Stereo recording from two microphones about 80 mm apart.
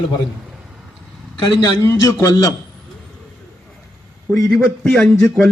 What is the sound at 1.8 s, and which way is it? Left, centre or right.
Speech, left.